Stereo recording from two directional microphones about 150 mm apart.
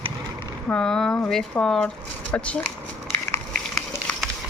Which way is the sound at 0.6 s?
5° left (ahead or behind).